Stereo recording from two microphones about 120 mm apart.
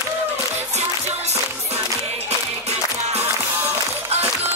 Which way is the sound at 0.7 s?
65° right (ahead or behind).